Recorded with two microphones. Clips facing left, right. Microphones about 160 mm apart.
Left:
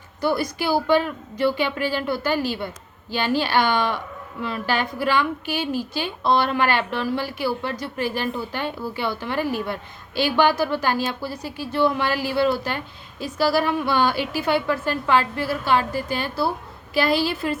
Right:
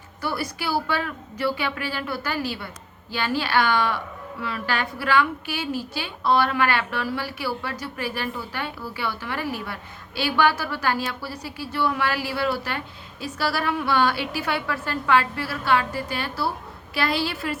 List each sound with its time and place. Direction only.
0.2 s a woman's voice: 20° left (ahead or behind)